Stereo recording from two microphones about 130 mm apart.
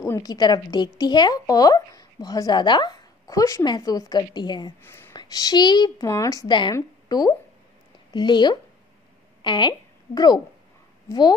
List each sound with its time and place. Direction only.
0.0 s a woman's voice: 25° left (ahead or behind)
4.8 s a sound: 15° left (ahead or behind)
5.1 s a woman's voice: 30° left (ahead or behind)